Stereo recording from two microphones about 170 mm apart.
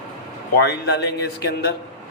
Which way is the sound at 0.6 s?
75° left (ahead or behind).